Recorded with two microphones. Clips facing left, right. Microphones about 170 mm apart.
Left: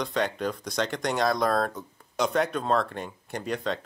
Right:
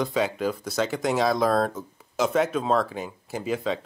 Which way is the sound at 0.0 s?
5° right (ahead or behind).